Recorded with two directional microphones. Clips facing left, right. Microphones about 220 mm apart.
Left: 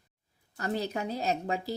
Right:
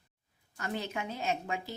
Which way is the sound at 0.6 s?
35° left (ahead or behind).